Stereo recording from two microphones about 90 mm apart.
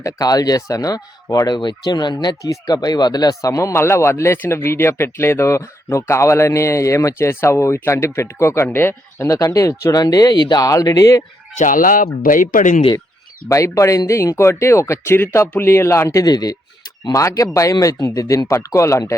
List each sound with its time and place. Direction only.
0.0 s speech: 45° left (ahead or behind)
13.5 s speech: 35° left (ahead or behind)
16.2 s speech: 45° left (ahead or behind)